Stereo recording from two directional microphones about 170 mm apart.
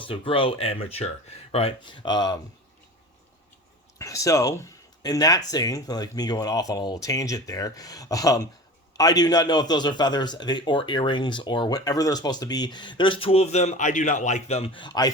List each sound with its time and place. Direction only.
0.1 s a man's voice: 30° left (ahead or behind)
3.9 s a man's voice: 20° left (ahead or behind)